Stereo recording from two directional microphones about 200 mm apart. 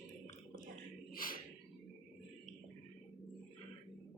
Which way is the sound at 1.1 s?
45° left (ahead or behind).